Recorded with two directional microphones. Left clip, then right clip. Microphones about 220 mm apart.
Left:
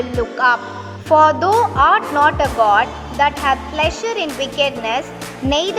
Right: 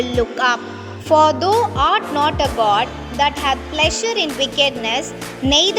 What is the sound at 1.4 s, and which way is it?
Speech, 45° right (ahead or behind).